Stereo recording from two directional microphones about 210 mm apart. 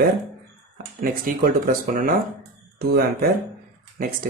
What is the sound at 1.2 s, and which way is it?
Speech, 45° right (ahead or behind).